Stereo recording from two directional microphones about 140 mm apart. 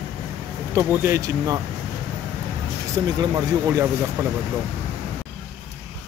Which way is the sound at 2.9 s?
25° right (ahead or behind).